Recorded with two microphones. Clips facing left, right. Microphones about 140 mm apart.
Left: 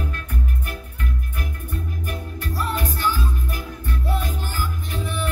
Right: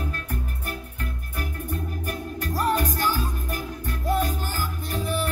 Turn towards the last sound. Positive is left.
turn(degrees=-35)  # may be behind; listen again after turning